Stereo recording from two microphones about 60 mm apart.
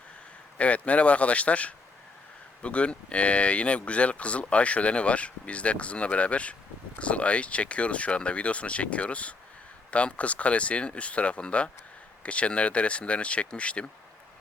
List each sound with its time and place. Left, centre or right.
0.6 s speech: left